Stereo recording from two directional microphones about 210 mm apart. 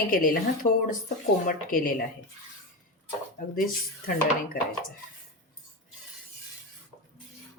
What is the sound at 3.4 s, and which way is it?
Speech, 40° left (ahead or behind).